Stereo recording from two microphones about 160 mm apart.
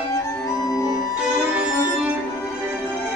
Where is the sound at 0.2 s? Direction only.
20° left (ahead or behind).